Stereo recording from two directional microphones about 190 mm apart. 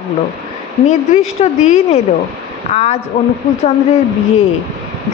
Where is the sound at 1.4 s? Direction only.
35° left (ahead or behind).